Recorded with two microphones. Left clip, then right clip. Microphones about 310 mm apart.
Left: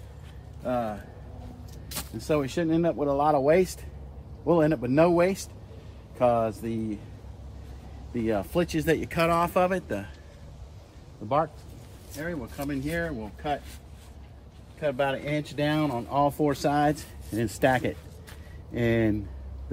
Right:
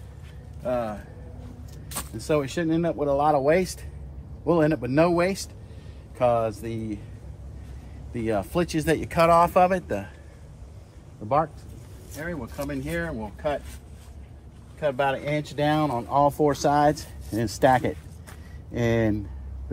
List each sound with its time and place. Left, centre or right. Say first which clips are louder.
0.7 s a sound: right 2 dB; right
1.9 s speech: right 2 dB; centre
8.1 s speech: right 1 dB; centre
11.2 s speech: right 2 dB; centre
14.8 s speech: right 3 dB; centre